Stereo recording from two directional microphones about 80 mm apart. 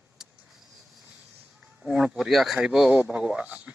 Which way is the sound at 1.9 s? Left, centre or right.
Centre.